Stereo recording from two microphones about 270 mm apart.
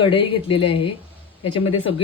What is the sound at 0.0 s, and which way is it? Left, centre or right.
Speech, centre.